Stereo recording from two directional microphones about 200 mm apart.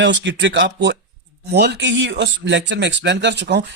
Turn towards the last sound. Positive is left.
turn(degrees=-55)  # may be behind; listen again after turning